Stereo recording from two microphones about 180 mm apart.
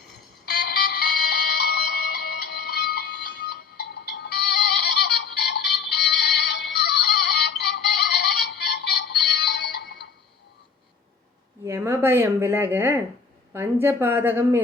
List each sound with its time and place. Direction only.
0.6 s music: 60° left (ahead or behind)
11.6 s a woman's voice: 15° right (ahead or behind)